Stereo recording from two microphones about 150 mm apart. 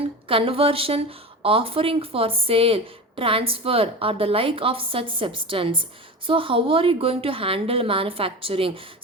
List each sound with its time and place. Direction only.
0.3 s speech: 35° right (ahead or behind)